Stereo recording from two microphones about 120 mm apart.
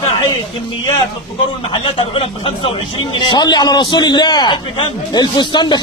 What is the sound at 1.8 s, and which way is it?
A man's voice, 50° left (ahead or behind).